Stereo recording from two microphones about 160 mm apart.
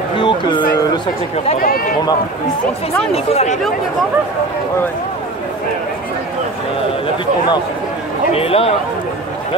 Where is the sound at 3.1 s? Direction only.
40° left (ahead or behind).